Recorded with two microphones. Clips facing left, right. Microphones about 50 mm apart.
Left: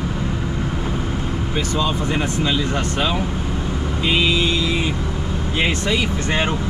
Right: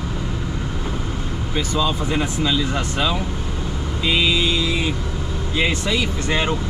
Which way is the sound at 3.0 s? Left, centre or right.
Centre.